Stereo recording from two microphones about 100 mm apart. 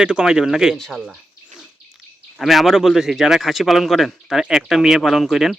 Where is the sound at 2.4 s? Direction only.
Centre (ahead or behind).